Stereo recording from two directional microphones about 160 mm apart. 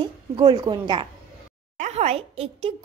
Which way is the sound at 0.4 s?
25° right (ahead or behind).